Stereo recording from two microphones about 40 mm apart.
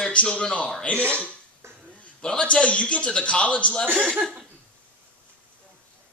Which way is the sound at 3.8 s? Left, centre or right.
Right.